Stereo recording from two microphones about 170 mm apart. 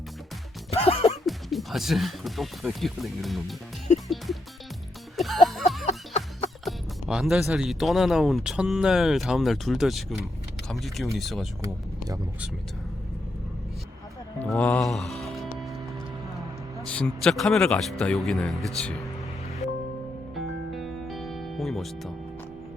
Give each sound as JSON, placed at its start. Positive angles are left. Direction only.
{"t": 0.7, "sound": "music", "side_deg": 35}
{"t": 1.2, "sound": "speech", "side_deg": 0}
{"t": 3.9, "sound": "music", "side_deg": 45}
{"t": 5.1, "sound": "music", "side_deg": 0}
{"t": 5.8, "sound": "a sound", "side_deg": 35}
{"t": 6.7, "sound": "speech", "side_deg": -5}
{"t": 11.6, "sound": "speech", "side_deg": -20}
{"t": 14.3, "sound": "speech", "side_deg": 10}
{"t": 16.8, "sound": "speech", "side_deg": 5}
{"t": 20.3, "sound": "music", "side_deg": 0}